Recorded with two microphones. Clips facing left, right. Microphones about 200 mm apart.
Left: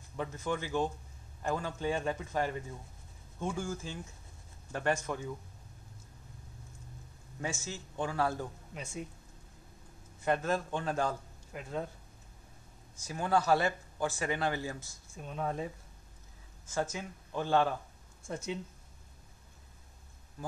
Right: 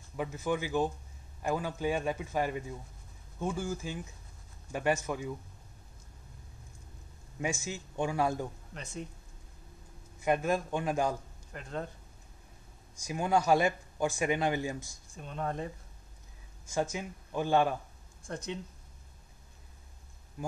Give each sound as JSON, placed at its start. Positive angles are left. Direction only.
{"t": 0.2, "sound": "speech", "side_deg": -10}
{"t": 7.4, "sound": "speech", "side_deg": -15}
{"t": 8.7, "sound": "speech", "side_deg": 10}
{"t": 10.2, "sound": "speech", "side_deg": -10}
{"t": 11.5, "sound": "speech", "side_deg": 5}
{"t": 13.0, "sound": "speech", "side_deg": -15}
{"t": 15.1, "sound": "speech", "side_deg": 5}
{"t": 16.7, "sound": "speech", "side_deg": -10}
{"t": 18.2, "sound": "speech", "side_deg": 5}
{"t": 20.4, "sound": "a sound", "side_deg": -15}